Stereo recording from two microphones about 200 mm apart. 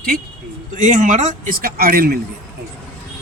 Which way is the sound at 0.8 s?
40° right (ahead or behind).